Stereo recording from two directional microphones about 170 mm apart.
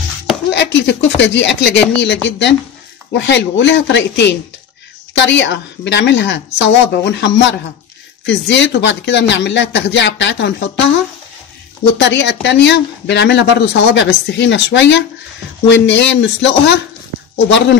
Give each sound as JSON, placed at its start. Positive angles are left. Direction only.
{"t": 0.5, "sound": "speech", "side_deg": 90}
{"t": 12.0, "sound": "speech", "side_deg": 90}